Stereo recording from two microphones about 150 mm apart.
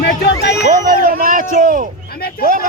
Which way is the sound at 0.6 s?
60° right (ahead or behind).